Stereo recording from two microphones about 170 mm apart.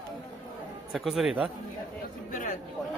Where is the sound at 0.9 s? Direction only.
Centre (ahead or behind).